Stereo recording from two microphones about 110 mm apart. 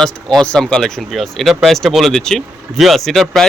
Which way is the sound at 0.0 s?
5° left (ahead or behind).